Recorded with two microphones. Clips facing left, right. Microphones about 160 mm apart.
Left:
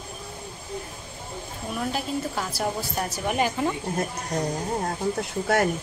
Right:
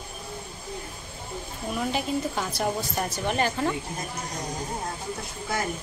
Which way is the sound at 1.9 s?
5° left (ahead or behind).